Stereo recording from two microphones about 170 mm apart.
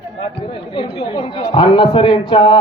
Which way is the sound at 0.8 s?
35° left (ahead or behind).